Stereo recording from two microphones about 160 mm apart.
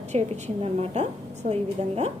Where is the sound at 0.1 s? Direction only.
45° right (ahead or behind).